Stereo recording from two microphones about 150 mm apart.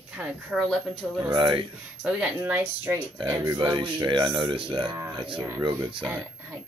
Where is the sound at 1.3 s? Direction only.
35° right (ahead or behind).